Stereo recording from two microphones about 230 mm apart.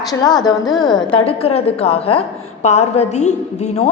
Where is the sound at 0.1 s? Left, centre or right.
Centre.